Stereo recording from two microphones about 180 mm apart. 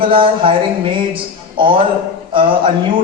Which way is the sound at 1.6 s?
30° right (ahead or behind).